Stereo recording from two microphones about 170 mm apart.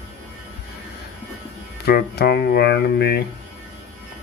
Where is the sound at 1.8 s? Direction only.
70° left (ahead or behind).